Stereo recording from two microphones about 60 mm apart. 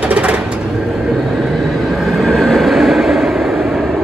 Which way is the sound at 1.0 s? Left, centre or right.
Centre.